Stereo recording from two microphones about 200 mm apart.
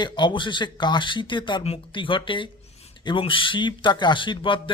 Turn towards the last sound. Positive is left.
turn(degrees=25)  # may be behind; listen again after turning